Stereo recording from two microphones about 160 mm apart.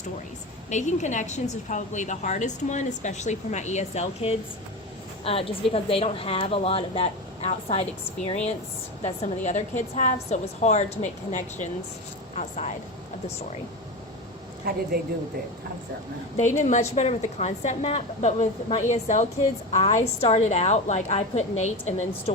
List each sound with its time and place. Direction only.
0.7 s a woman's voice: 50° left (ahead or behind)
14.9 s speech: 75° right (ahead or behind)
16.4 s a woman's voice: 50° left (ahead or behind)